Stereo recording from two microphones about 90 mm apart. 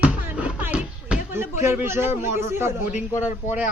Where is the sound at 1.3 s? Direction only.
25° right (ahead or behind).